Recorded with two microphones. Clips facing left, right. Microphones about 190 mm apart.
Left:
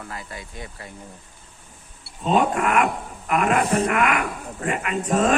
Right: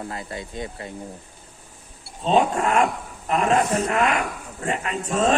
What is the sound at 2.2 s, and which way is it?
Speech, 30° right (ahead or behind).